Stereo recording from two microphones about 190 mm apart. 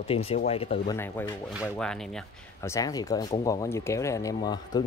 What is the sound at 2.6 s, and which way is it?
Speech, 15° left (ahead or behind).